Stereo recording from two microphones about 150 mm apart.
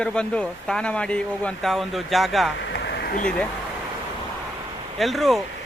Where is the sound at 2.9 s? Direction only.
90° left.